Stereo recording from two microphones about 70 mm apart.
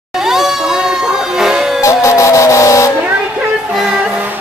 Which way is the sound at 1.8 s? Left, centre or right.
Left.